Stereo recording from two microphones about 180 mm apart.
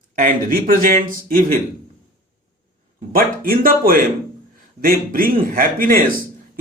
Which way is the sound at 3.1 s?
55° right (ahead or behind).